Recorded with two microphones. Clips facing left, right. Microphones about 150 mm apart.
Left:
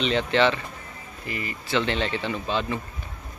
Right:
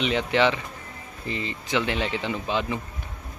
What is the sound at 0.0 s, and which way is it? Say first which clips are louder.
Speech: left 1 dB; 15° right (ahead or behind).